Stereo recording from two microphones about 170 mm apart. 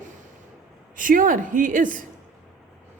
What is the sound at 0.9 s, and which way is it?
Speech, 50° right (ahead or behind).